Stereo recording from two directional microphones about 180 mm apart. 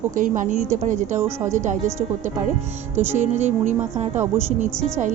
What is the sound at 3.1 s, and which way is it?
A woman's voice, 40° right (ahead or behind).